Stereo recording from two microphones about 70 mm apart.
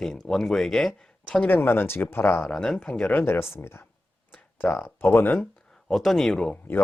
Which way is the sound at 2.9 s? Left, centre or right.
Left.